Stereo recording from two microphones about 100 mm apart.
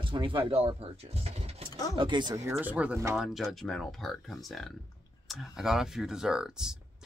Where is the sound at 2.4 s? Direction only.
15° right (ahead or behind).